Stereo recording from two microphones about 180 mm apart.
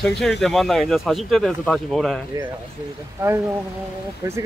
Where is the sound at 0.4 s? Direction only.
Centre (ahead or behind).